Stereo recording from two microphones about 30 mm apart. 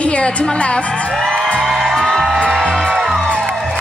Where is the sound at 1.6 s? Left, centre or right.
Centre.